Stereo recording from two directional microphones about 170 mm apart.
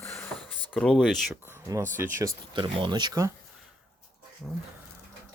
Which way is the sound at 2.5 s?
30° right (ahead or behind).